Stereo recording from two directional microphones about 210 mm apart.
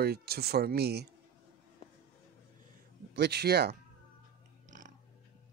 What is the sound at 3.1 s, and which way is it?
Speech, 50° right (ahead or behind).